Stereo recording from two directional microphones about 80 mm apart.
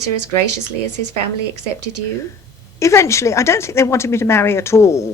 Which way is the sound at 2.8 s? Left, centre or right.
Left.